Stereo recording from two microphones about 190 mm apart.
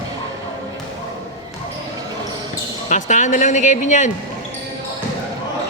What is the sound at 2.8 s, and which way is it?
Speech, 40° left (ahead or behind).